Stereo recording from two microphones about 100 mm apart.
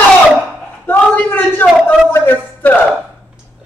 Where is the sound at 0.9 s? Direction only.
20° left (ahead or behind).